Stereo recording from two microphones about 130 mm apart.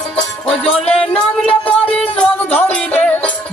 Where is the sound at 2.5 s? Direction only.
10° left (ahead or behind).